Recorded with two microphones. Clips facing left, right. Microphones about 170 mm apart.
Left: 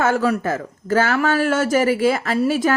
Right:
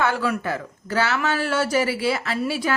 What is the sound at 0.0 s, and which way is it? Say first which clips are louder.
Speech: left 4 dB; 45° left (ahead or behind).